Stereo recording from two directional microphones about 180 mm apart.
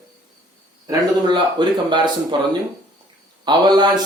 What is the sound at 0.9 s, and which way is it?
Speech, 25° right (ahead or behind).